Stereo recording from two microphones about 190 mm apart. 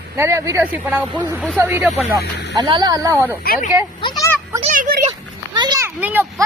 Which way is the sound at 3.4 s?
50° left (ahead or behind).